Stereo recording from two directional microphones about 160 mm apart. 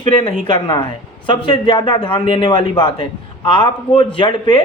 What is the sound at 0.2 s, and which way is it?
A man's voice, 30° left (ahead or behind).